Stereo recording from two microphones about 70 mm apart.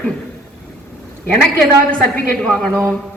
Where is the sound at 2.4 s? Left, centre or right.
Centre.